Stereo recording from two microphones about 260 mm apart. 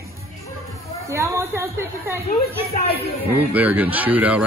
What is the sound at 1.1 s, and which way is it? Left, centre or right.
Speech, centre.